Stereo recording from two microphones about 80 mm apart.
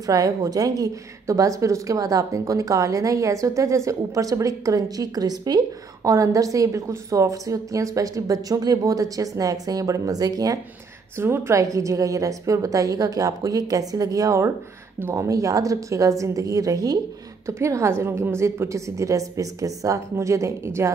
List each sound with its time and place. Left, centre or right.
0.0 s a woman's voice: right
6.0 s a woman's voice: right
11.1 s a woman's voice: right
15.0 s speech: right
15.2 s a woman's voice: right